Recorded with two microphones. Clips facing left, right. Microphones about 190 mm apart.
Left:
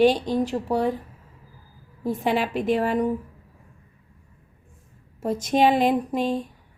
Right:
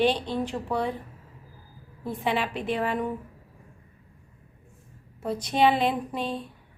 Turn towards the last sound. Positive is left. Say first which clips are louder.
# left 7 dB
turn(degrees=45)  # may be behind; listen again after turning